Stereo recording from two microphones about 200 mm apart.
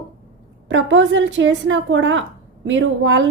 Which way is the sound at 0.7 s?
70° right (ahead or behind).